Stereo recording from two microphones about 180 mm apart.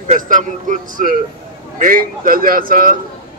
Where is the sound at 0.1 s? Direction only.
45° right (ahead or behind).